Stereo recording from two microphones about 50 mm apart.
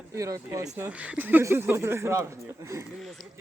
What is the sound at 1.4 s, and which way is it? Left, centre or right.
Speech, right.